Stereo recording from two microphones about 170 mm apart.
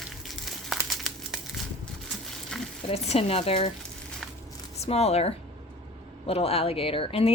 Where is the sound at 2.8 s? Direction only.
35° left (ahead or behind).